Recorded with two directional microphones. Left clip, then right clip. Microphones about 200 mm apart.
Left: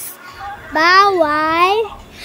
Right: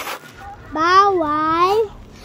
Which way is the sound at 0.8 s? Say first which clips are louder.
Left 3 dB; 15° left (ahead or behind).